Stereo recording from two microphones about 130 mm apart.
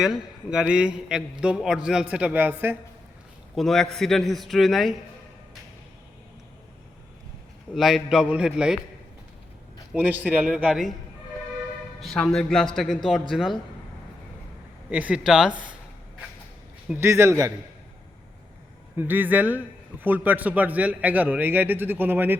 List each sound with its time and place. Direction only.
0.0 s a man's voice: 5° right (ahead or behind)
3.5 s a man's voice: centre (ahead or behind)
7.8 s a man's voice: centre (ahead or behind)
9.9 s a man's voice: 10° right (ahead or behind)
11.9 s a man's voice: centre (ahead or behind)
14.8 s a man's voice: 10° right (ahead or behind)
17.0 s a man's voice: 20° right (ahead or behind)
18.9 s a man's voice: 15° right (ahead or behind)